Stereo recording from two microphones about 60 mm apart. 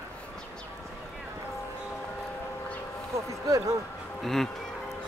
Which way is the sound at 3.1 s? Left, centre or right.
Right.